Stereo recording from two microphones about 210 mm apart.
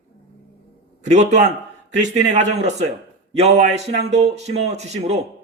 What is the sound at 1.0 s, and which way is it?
Speech, 35° right (ahead or behind).